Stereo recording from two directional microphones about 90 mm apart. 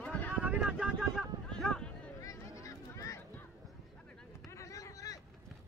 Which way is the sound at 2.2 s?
35° left (ahead or behind).